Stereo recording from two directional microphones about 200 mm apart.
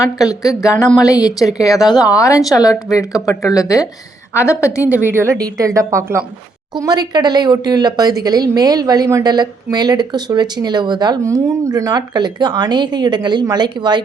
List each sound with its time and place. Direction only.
0.0 s speech: 15° left (ahead or behind)
5.0 s a woman's voice: 10° right (ahead or behind)